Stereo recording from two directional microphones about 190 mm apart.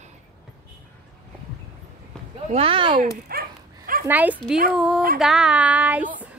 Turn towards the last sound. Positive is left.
turn(degrees=-10)  # may be behind; listen again after turning